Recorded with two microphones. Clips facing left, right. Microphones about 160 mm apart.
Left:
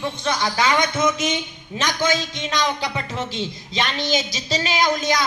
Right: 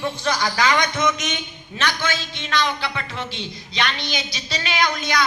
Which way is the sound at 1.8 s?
15° left (ahead or behind).